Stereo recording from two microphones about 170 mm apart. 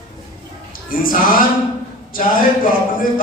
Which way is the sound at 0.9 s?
55° left (ahead or behind).